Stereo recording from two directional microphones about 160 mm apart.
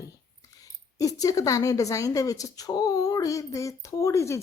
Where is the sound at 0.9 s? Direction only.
20° left (ahead or behind).